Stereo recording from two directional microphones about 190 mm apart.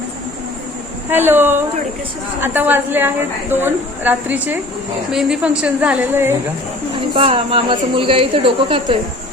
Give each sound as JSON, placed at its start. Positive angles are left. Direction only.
{"t": 1.1, "sound": "a woman's voice", "side_deg": -10}
{"t": 7.1, "sound": "speech", "side_deg": -30}